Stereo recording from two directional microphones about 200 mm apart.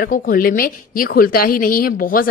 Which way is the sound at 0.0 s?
45° left (ahead or behind).